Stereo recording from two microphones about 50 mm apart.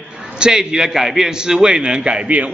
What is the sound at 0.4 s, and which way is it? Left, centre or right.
A man's voice, centre.